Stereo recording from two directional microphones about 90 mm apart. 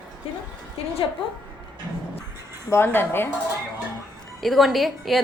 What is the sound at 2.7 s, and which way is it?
Speech, 25° left (ahead or behind).